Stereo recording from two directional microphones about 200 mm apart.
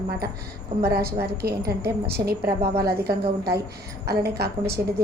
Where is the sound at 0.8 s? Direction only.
50° right (ahead or behind).